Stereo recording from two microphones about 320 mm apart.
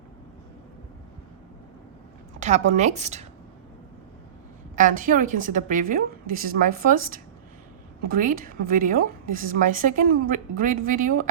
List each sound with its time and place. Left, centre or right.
2.4 s a woman's voice: right
4.7 s a woman's voice: right